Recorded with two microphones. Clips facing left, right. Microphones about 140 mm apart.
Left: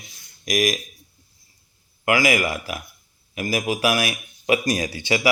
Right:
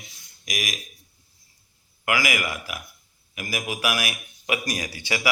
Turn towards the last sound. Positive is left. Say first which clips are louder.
# left 7 dB
turn(degrees=25)  # may be behind; listen again after turning